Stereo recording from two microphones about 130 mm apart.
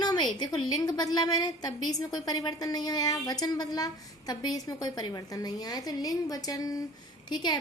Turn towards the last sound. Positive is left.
turn(degrees=35)  # may be behind; listen again after turning